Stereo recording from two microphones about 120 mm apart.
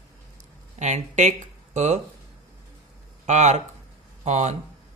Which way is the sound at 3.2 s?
75° right (ahead or behind).